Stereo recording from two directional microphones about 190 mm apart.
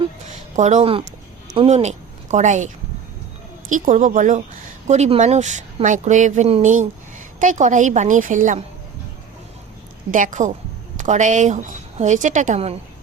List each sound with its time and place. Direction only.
0.3 s speech: 40° right (ahead or behind)
3.7 s speech: 40° right (ahead or behind)
10.1 s speech: 45° right (ahead or behind)